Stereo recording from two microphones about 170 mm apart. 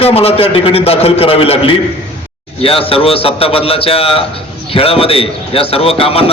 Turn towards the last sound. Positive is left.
turn(degrees=35)  # may be behind; listen again after turning